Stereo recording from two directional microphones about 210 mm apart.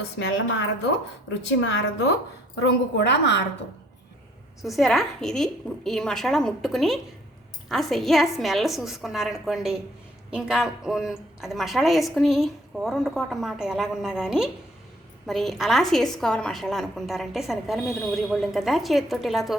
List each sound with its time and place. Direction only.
0.2 s a woman's voice: 55° left (ahead or behind)
3.0 s a woman's voice: 55° left (ahead or behind)
4.6 s a woman's voice: centre (ahead or behind)